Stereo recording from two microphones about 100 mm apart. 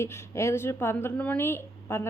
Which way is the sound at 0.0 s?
25° left (ahead or behind).